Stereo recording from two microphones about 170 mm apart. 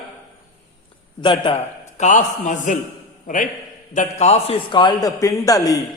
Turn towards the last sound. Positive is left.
turn(degrees=20)  # may be behind; listen again after turning